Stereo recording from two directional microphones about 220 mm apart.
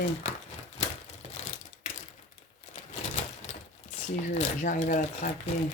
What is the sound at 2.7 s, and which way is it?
Typewriter, 30° left (ahead or behind).